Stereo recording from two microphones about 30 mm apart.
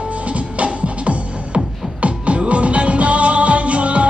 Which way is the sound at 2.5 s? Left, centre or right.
Right.